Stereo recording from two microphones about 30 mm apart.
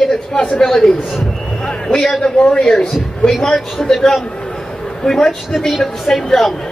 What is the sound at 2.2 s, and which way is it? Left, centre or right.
Speech, left.